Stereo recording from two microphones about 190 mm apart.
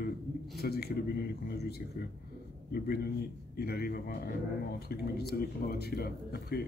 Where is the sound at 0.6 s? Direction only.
55° left (ahead or behind).